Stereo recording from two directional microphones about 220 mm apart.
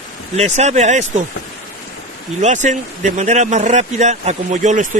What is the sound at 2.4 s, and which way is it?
Speech, 35° right (ahead or behind).